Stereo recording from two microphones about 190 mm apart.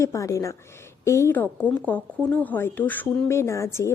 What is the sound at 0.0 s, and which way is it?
Speech, 15° left (ahead or behind).